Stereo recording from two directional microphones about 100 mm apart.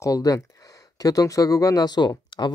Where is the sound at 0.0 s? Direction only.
35° left (ahead or behind).